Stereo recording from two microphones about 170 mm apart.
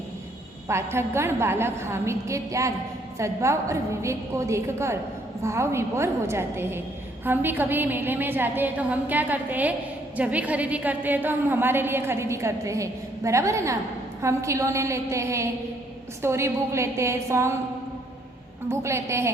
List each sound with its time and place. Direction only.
0.7 s a woman's voice: 15° right (ahead or behind)
18.7 s a woman's voice: 15° right (ahead or behind)